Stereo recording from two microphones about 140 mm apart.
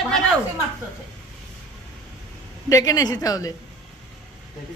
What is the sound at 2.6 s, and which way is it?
Speech, 25° left (ahead or behind).